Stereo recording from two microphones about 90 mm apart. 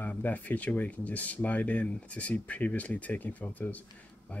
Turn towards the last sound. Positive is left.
turn(degrees=15)  # may be behind; listen again after turning